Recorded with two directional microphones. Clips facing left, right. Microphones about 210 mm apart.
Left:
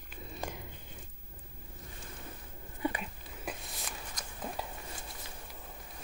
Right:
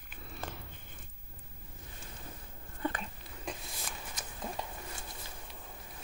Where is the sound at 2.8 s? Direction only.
10° left (ahead or behind).